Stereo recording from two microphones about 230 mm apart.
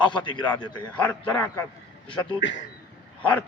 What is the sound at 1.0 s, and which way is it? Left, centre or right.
Speech, centre.